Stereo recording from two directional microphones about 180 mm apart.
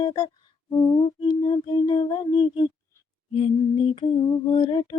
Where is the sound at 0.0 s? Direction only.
25° left (ahead or behind).